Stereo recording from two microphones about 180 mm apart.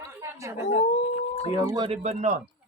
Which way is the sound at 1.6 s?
25° right (ahead or behind).